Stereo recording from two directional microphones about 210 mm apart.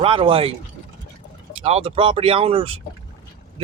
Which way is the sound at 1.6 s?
30° right (ahead or behind).